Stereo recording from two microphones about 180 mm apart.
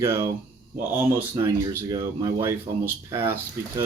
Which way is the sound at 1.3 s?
20° right (ahead or behind).